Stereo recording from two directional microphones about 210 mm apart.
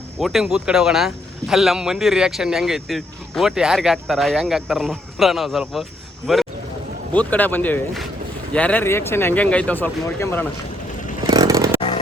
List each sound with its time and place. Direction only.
0.2 s speech: centre (ahead or behind)
11.3 s vehicle: 20° right (ahead or behind)